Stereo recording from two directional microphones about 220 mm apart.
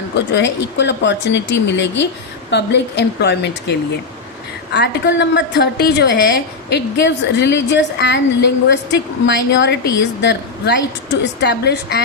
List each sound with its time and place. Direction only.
0.3 s a woman's voice: 50° left (ahead or behind)